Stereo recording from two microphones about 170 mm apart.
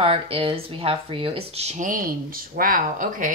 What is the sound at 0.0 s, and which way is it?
A woman's voice, 35° right (ahead or behind).